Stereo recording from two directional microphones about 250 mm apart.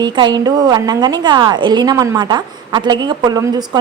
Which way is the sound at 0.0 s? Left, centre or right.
Centre.